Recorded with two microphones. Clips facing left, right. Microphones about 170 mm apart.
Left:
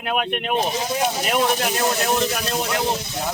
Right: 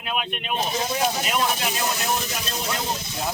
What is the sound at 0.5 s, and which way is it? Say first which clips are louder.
Speech: left 2 dB; 15° left (ahead or behind).